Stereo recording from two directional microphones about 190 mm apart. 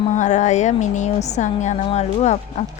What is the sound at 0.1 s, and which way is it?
A woman's voice, 40° left (ahead or behind).